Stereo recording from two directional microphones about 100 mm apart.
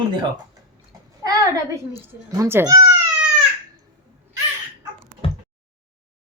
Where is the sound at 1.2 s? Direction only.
35° right (ahead or behind).